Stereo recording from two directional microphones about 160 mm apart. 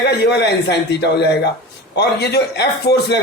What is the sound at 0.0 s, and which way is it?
Speech, 90° left.